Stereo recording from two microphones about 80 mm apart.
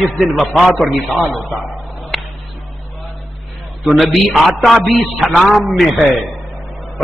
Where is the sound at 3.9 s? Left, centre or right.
Centre.